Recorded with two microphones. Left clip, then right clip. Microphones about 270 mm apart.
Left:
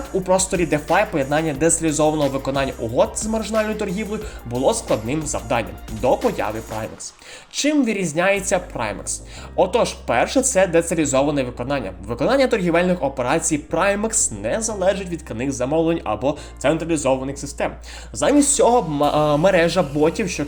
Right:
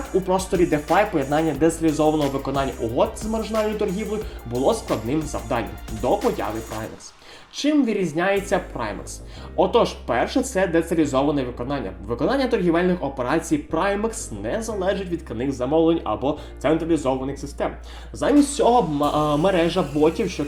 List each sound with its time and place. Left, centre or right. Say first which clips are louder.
0.3 s speech: left 3 dB; left
2.5 s speech: left 2 dB; centre
2.9 s speech: left 4 dB; left
4.0 s speech: even; centre
5.0 s speech: left 2 dB; left
6.6 s speech: left 3 dB; centre
7.5 s speech: left 1 dB; left